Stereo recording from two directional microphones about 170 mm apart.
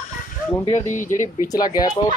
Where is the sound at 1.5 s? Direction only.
25° left (ahead or behind).